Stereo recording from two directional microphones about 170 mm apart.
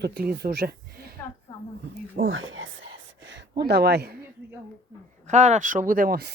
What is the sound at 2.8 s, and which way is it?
Whispering, 90° right.